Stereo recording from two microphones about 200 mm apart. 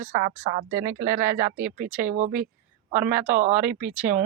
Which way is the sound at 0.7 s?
15° right (ahead or behind).